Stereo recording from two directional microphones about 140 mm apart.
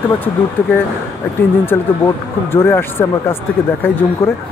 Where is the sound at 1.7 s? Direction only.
15° left (ahead or behind).